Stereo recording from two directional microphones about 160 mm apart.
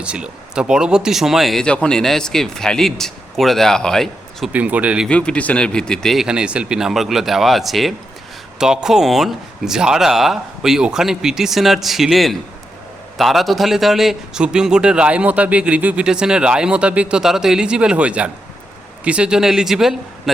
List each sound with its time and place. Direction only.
0.0 s a man's voice: 5° right (ahead or behind)
5.0 s a man's voice: 5° left (ahead or behind)